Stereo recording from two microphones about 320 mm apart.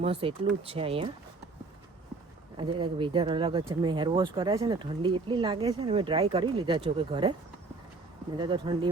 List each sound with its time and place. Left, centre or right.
0.0 s speech: centre
2.6 s speech: centre
8.4 s speech: centre